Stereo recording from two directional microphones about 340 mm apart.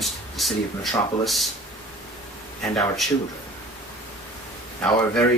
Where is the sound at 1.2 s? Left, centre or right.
Centre.